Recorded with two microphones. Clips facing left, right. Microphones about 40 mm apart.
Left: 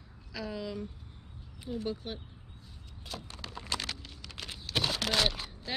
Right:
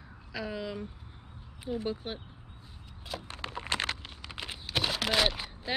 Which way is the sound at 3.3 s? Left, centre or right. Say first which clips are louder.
Right 4 dB; right.